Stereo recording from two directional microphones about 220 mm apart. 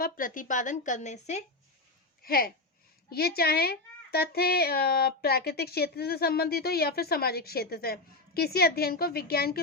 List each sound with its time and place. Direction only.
0.0 s a woman's voice: 40° left (ahead or behind)
2.2 s speech: 45° left (ahead or behind)